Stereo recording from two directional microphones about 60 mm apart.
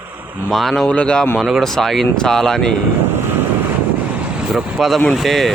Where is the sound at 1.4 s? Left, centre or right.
Centre.